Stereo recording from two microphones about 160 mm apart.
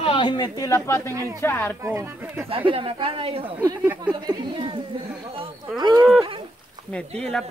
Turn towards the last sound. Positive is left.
turn(degrees=5)  # may be behind; listen again after turning